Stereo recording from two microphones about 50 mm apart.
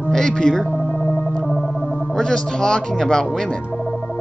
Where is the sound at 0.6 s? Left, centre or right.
Left.